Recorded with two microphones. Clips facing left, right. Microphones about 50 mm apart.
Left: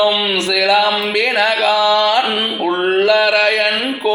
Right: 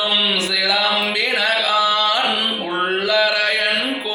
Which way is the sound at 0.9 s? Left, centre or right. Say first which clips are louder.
Left 2 dB; left.